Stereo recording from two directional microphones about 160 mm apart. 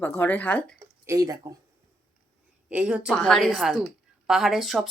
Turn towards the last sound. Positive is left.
turn(degrees=0)  # may be behind; listen again after turning